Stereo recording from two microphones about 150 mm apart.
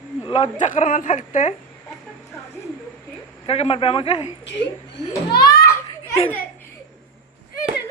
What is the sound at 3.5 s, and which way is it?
Speech, 40° left (ahead or behind).